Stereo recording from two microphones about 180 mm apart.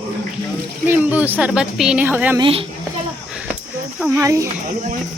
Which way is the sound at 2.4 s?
30° right (ahead or behind).